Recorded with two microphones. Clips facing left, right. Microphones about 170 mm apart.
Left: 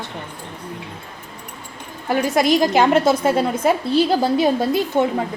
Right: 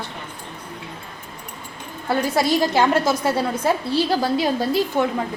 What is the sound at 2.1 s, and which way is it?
A woman's voice, 15° left (ahead or behind).